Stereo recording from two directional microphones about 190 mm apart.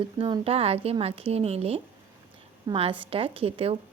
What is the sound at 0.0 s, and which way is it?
A woman's voice, 25° right (ahead or behind).